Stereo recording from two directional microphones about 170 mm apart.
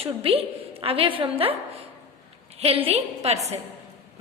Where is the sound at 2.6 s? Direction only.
35° right (ahead or behind).